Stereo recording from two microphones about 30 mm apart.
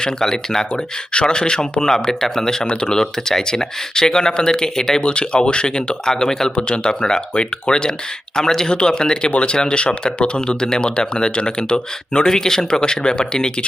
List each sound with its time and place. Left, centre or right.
0.0 s speech: centre
0.7 s speech: left
5.0 s speech: left
6.1 s speech: centre
6.6 s speech: left
8.7 s speech: left
9.3 s speech: left; by 12.8 s centre
12.8 s speech: left